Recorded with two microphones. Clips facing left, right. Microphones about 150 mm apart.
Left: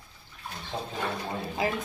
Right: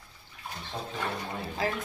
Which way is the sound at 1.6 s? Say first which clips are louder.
Left 2 dB; 15° left (ahead or behind).